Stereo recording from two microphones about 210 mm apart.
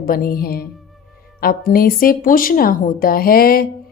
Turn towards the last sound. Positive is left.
turn(degrees=45)  # may be behind; listen again after turning